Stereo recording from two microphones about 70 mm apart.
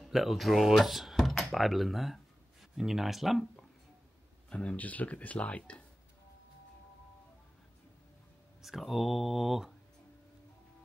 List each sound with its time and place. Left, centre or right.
0.0 s speech: centre
4.5 s speech: centre
8.6 s speech: centre